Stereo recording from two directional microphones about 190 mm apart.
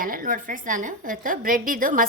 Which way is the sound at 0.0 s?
45° right (ahead or behind).